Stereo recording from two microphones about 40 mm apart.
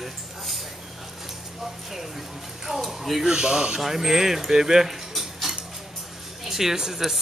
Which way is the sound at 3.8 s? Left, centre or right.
Centre.